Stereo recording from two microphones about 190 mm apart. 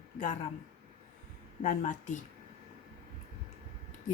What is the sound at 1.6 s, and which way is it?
Speech, 40° left (ahead or behind).